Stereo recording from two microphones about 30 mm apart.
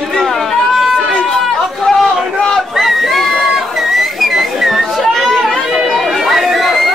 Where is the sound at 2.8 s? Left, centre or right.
Centre.